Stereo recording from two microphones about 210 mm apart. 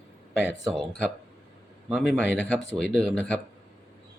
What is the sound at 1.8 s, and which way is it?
Speech, centre (ahead or behind).